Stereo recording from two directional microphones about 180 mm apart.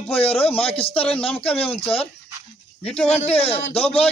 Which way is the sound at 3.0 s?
35° left (ahead or behind).